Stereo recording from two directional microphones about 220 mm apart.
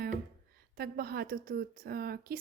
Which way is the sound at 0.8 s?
45° right (ahead or behind).